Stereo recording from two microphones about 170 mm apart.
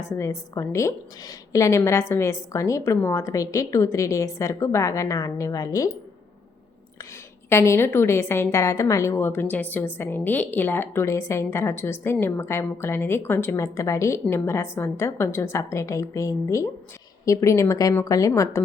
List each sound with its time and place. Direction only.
0.0 s a woman's voice: 15° left (ahead or behind)
7.5 s a woman's voice: 15° left (ahead or behind)